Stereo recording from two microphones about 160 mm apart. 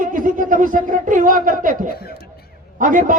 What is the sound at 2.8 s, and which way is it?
Speech, 55° right (ahead or behind).